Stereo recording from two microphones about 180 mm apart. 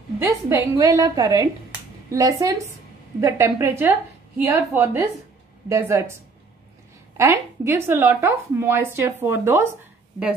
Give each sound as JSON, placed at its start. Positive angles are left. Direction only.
{"t": 0.2, "sound": "a woman's voice", "side_deg": -15}
{"t": 7.2, "sound": "speech", "side_deg": -15}